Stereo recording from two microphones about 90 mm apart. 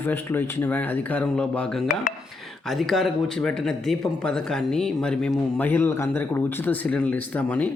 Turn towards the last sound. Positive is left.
turn(degrees=15)  # may be behind; listen again after turning